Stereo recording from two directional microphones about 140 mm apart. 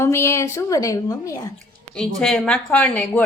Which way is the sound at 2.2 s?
5° left (ahead or behind).